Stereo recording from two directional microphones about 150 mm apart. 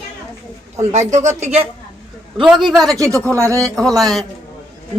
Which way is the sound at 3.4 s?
20° right (ahead or behind).